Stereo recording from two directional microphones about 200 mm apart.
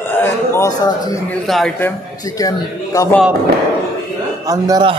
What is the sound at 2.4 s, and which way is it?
Speech, 15° left (ahead or behind).